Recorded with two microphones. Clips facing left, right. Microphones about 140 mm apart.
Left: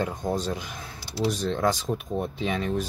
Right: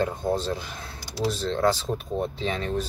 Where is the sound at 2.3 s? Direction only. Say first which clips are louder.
Left 1 dB; 30° right (ahead or behind).